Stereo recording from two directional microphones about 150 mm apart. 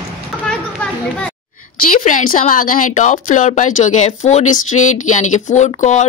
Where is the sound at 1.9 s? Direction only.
60° left (ahead or behind).